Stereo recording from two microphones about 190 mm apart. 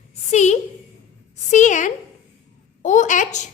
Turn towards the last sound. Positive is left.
turn(degrees=40)  # may be behind; listen again after turning